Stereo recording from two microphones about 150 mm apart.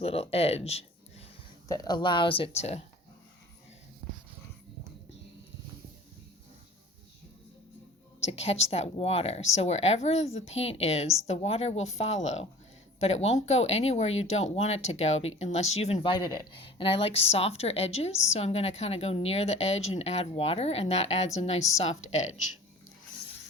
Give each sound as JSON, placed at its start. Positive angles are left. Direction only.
{"t": 0.0, "sound": "speech", "side_deg": 40}
{"t": 1.6, "sound": "speech", "side_deg": 25}
{"t": 8.2, "sound": "a woman's voice", "side_deg": 45}
{"t": 16.1, "sound": "a woman's voice", "side_deg": 30}